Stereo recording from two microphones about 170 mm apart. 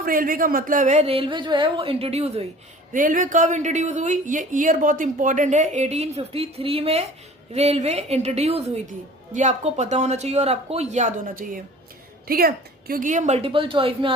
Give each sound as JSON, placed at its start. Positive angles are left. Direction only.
{"t": 0.0, "sound": "a woman's voice", "side_deg": -55}
{"t": 2.9, "sound": "a woman's voice", "side_deg": -55}
{"t": 12.3, "sound": "a woman's voice", "side_deg": -60}